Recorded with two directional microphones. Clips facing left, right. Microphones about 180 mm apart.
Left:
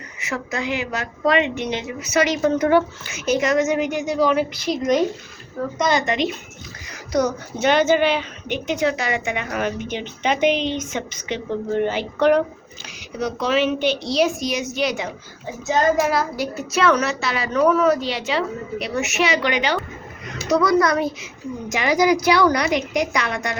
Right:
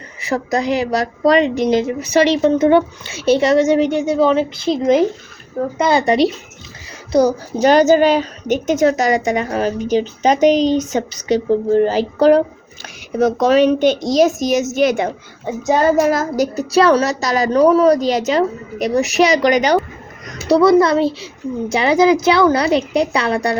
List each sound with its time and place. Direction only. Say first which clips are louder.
0.2 s a woman's voice: right 8 dB; 35° right (ahead or behind)
2.5 s a woman's voice: right 5 dB; 20° right (ahead or behind)
13.1 s a child's voice: right 8 dB; 45° right (ahead or behind)